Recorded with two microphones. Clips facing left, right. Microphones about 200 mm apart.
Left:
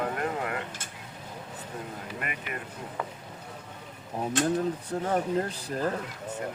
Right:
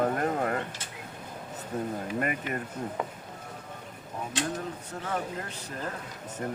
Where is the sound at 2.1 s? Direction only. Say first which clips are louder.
Right 6 dB; 40° right (ahead or behind).